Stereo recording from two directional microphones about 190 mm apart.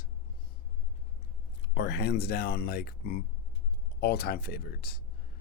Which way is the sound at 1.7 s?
65° left (ahead or behind).